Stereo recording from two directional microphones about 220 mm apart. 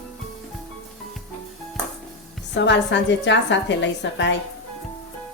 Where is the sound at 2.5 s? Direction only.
55° left (ahead or behind).